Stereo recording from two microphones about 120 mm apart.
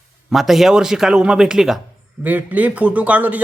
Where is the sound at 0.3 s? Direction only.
Centre (ahead or behind).